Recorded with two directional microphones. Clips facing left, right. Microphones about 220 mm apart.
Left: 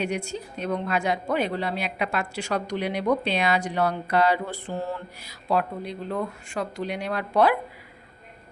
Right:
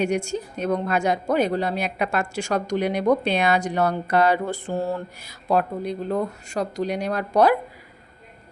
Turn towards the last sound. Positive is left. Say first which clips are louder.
# right 3 dB
turn(degrees=-45)  # may be behind; listen again after turning